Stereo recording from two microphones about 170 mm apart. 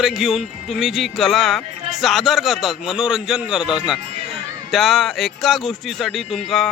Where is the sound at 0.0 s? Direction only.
Centre (ahead or behind).